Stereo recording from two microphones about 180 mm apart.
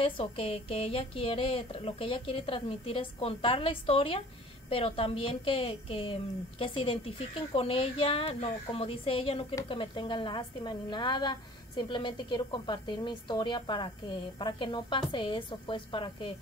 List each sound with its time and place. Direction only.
0.0 s a woman's voice: 30° left (ahead or behind)